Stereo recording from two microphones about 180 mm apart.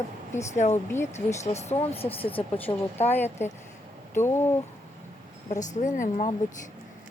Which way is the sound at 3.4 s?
40° left (ahead or behind).